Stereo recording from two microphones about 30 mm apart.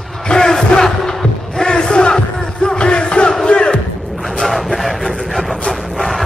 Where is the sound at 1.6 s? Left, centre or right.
Left.